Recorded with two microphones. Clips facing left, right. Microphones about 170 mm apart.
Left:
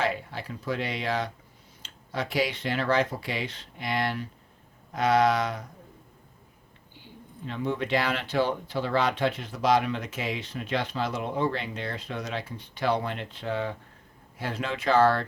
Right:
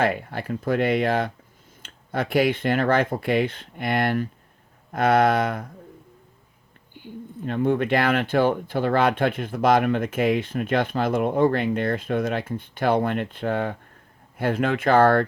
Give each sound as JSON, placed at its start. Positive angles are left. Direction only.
{"t": 0.0, "sound": "speech", "side_deg": -55}
{"t": 6.9, "sound": "speech", "side_deg": -55}